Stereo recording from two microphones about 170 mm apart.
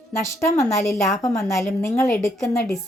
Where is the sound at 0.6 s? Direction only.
15° left (ahead or behind).